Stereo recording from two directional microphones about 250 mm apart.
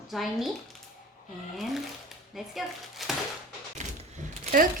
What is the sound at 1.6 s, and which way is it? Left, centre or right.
Speech, centre.